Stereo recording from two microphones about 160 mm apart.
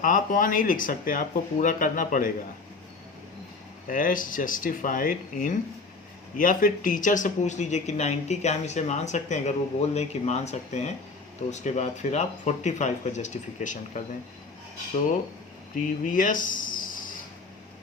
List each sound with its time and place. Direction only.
0.0 s speech: 55° left (ahead or behind)
3.8 s speech: 55° left (ahead or behind)
16.0 s speech: 55° left (ahead or behind)